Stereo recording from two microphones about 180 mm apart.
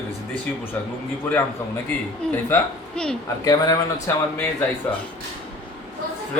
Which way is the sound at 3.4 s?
20° left (ahead or behind).